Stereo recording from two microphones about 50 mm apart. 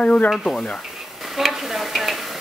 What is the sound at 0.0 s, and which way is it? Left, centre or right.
Stir, left.